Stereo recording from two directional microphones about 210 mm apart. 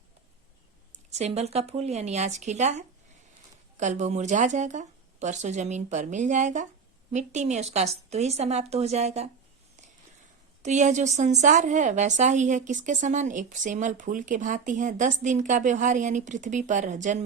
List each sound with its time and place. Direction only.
1.1 s a woman's voice: 30° right (ahead or behind)
10.6 s a woman's voice: 35° right (ahead or behind)